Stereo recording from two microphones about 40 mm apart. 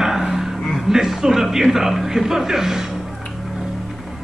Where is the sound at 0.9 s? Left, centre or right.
Centre.